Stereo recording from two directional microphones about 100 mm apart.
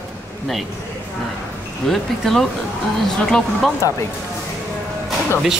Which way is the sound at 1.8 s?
Centre (ahead or behind).